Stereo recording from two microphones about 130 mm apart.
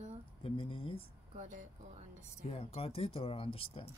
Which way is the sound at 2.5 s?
50° left (ahead or behind).